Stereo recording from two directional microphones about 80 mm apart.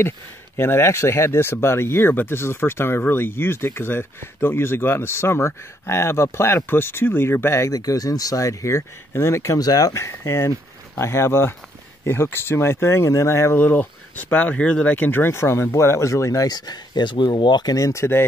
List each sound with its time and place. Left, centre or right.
0.6 s speech: left
7.8 s speech: left
9.6 s speech: left
13.6 s speech: left
17.7 s speech: left